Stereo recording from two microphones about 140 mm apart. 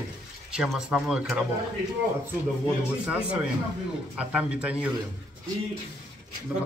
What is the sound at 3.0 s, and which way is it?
A man's voice, 5° right (ahead or behind).